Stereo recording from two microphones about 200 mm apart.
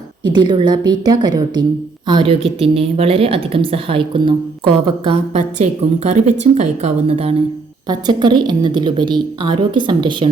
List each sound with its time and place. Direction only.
0.3 s a woman's voice: 20° right (ahead or behind)